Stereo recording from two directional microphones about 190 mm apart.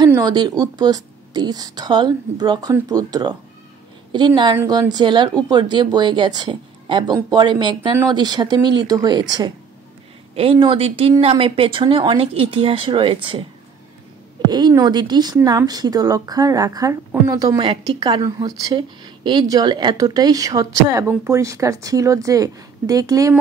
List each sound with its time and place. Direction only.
0.0 s speech: 20° right (ahead or behind)
10.3 s speech: 30° right (ahead or behind)
14.5 s speech: 20° right (ahead or behind)